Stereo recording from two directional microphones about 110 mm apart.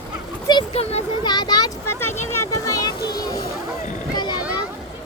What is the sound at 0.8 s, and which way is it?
Speech, 75° left (ahead or behind).